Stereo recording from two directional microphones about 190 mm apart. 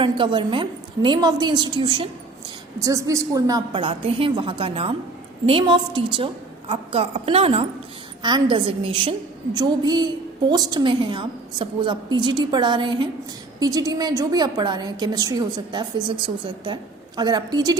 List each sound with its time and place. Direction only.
0.0 s a woman's voice: 25° right (ahead or behind)